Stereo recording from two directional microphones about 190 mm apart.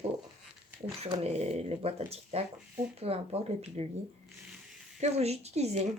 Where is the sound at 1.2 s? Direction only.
35° right (ahead or behind).